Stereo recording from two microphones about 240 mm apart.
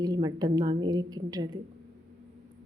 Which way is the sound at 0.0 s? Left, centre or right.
Centre.